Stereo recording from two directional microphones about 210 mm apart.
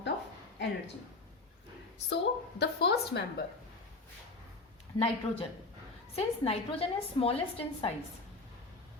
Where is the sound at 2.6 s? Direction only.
50° left (ahead or behind).